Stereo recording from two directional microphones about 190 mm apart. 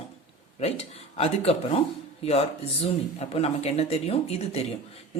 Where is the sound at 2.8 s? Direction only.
30° left (ahead or behind).